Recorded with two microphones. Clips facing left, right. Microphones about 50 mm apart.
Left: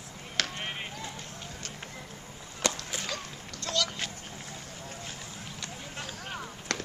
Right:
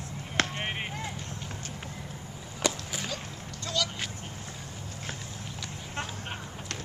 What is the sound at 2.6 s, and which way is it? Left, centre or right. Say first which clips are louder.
Chop: right 1 dB; centre.